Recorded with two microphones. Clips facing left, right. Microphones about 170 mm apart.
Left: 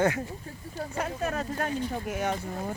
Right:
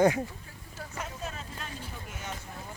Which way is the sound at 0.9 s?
60° left (ahead or behind).